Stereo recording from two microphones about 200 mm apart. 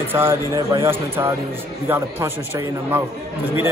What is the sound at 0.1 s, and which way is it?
A man's voice, 10° right (ahead or behind).